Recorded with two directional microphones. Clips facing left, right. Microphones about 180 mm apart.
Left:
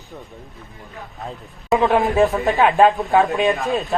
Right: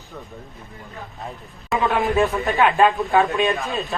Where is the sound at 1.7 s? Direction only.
Centre (ahead or behind).